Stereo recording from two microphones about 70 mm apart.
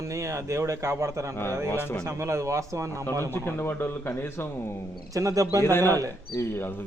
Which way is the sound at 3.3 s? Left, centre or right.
Left.